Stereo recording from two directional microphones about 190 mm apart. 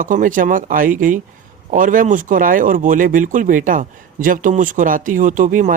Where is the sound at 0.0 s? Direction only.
45° right (ahead or behind).